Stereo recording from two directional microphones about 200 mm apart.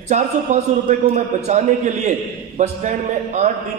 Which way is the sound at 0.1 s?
40° right (ahead or behind).